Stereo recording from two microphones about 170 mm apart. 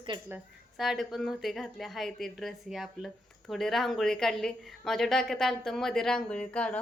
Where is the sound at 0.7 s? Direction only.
Centre (ahead or behind).